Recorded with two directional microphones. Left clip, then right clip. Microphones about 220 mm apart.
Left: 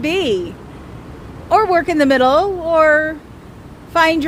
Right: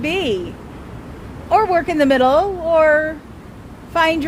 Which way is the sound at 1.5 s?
20° left (ahead or behind).